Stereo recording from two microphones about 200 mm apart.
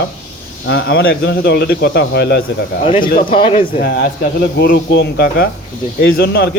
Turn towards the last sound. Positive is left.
turn(degrees=50)  # may be behind; listen again after turning